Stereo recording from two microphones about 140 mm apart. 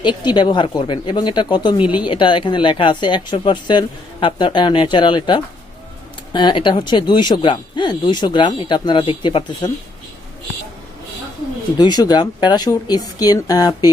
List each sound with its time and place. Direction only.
0.0 s speech: 30° left (ahead or behind)
11.8 s speech: 30° left (ahead or behind)